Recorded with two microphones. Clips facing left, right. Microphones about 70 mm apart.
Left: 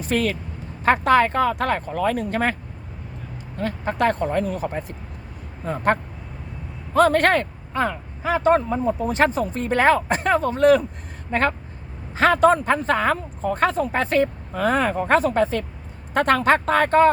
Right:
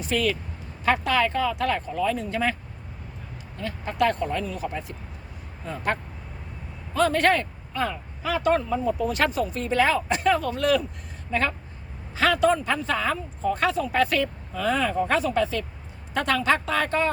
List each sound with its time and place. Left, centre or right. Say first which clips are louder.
0.0 s a man's voice: left 2 dB; left
3.6 s a man's voice: left 3 dB; left